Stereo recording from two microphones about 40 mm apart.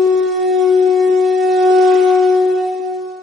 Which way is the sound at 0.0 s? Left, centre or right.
Centre.